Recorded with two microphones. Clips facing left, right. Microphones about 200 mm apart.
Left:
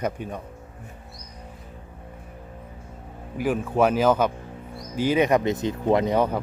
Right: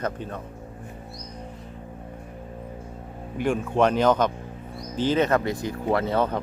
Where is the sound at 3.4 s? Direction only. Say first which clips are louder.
Even; 5° left (ahead or behind).